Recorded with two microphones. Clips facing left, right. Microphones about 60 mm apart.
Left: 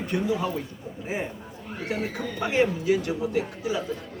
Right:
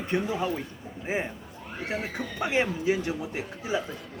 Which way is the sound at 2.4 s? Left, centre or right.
Right.